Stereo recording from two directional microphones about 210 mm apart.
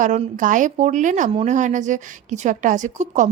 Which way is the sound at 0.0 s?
35° right (ahead or behind).